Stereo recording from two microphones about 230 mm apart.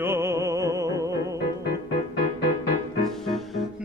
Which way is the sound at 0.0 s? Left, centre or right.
Centre.